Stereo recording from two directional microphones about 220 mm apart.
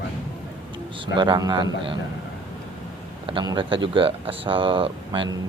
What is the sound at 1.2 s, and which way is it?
Speech, 20° right (ahead or behind).